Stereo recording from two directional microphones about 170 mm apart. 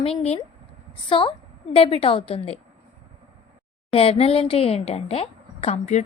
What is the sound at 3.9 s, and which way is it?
A woman's voice, 35° left (ahead or behind).